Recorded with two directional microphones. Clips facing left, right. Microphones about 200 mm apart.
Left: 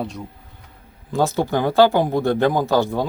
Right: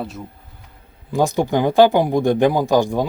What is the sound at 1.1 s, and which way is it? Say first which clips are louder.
Speech: right 2 dB; 15° right (ahead or behind).